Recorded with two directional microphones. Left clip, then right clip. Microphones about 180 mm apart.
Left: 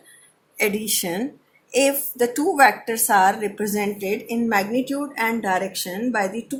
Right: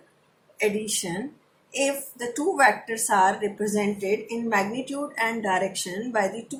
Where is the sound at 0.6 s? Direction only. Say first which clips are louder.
Left 3 dB; 60° left (ahead or behind).